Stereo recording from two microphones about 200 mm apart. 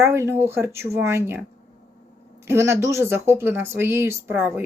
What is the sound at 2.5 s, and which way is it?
Speech, 15° right (ahead or behind).